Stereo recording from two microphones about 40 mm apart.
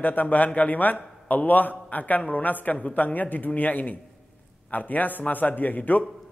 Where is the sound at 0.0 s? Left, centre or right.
Left.